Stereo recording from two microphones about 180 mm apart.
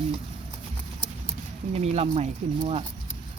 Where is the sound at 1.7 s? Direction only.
35° right (ahead or behind).